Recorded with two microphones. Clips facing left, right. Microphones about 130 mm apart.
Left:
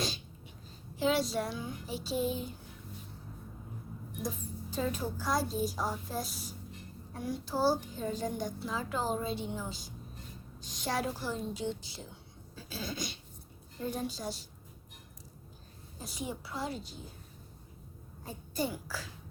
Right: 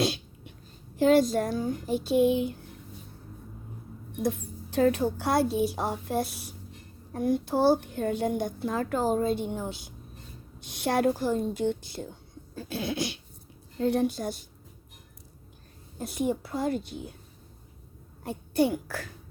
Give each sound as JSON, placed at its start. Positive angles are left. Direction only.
{"t": 0.0, "sound": "a sound", "side_deg": -65}
{"t": 0.9, "sound": "speech", "side_deg": -50}
{"t": 4.2, "sound": "a child's voice", "side_deg": -65}
{"t": 16.0, "sound": "a child's voice", "side_deg": -55}
{"t": 18.3, "sound": "a child's voice", "side_deg": -65}